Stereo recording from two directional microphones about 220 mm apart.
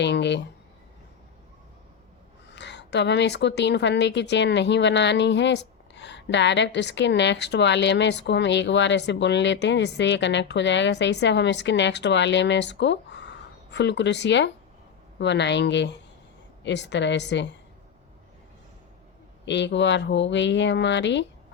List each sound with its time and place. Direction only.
0.0 s a woman's voice: 50° left (ahead or behind)
2.5 s a woman's voice: 50° left (ahead or behind)
19.5 s a woman's voice: 55° left (ahead or behind)